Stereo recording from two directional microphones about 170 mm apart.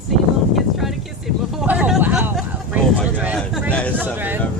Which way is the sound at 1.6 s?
5° right (ahead or behind).